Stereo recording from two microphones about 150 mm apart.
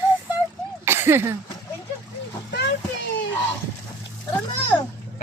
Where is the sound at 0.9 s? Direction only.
15° right (ahead or behind).